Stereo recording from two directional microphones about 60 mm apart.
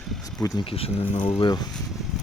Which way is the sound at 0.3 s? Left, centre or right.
Left.